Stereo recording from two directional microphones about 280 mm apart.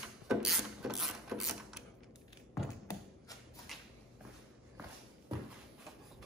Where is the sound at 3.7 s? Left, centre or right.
Centre.